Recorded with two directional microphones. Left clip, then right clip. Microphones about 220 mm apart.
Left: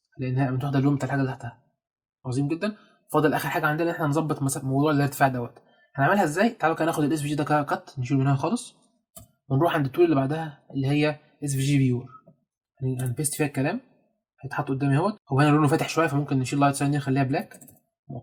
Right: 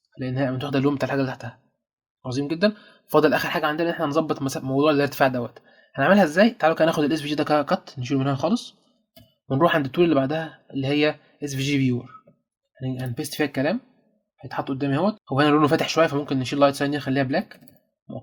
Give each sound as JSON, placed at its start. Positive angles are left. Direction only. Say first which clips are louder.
{"t": 0.2, "sound": "speech", "louder": "right 3 dB", "side_deg": -35}